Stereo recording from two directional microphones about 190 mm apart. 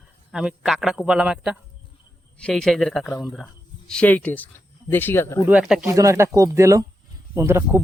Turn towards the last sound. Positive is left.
turn(degrees=-10)  # may be behind; listen again after turning